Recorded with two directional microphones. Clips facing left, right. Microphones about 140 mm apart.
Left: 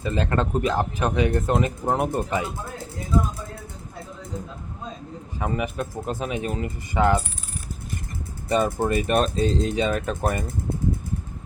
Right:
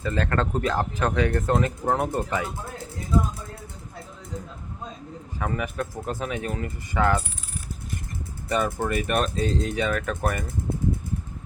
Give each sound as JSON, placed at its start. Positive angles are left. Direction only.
{"t": 0.0, "sound": "speech", "side_deg": 20}
{"t": 5.4, "sound": "speech", "side_deg": 20}
{"t": 8.4, "sound": "speech", "side_deg": 25}